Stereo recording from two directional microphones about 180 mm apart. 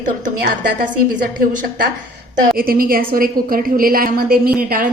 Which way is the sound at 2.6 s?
55° right (ahead or behind).